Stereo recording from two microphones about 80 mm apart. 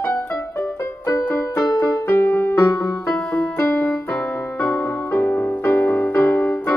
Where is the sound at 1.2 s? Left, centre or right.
Left.